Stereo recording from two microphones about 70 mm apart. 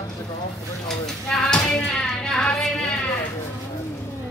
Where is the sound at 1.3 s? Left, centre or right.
Centre.